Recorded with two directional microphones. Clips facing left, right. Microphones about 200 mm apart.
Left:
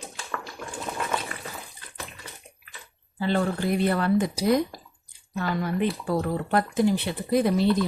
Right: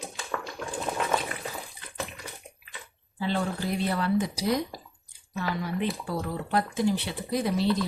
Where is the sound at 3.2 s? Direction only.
55° left (ahead or behind).